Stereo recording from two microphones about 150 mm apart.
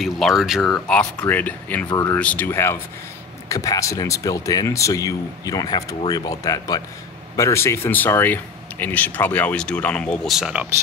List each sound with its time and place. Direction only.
0.0 s speech: centre (ahead or behind)
10.3 s speech: 5° right (ahead or behind)